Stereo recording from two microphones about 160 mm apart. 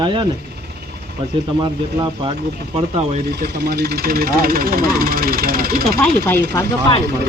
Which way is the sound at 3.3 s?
85° right.